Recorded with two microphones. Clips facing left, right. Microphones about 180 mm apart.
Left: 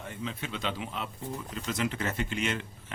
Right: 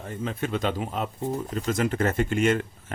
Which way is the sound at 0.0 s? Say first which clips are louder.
Right 7 dB; 45° right (ahead or behind).